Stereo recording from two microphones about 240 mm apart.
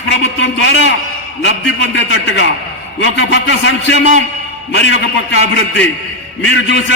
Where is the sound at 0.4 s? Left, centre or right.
Left.